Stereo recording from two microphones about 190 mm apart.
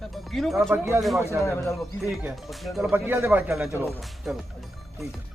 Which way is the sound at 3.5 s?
Centre (ahead or behind).